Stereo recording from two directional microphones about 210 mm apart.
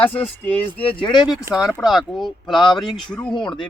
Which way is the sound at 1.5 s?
15° right (ahead or behind).